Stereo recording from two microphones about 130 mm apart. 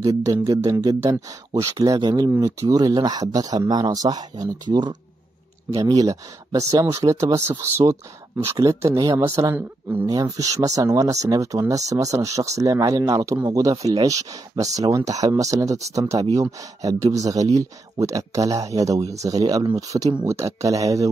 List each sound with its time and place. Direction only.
0.0 s speech: 25° right (ahead or behind)